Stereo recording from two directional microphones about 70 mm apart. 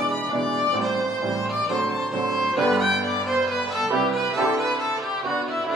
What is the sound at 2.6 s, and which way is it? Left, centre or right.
Music, centre.